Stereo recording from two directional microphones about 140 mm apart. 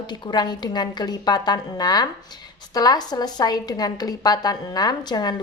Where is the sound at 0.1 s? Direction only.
35° left (ahead or behind).